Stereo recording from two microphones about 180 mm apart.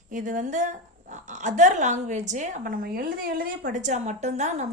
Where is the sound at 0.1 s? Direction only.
45° right (ahead or behind).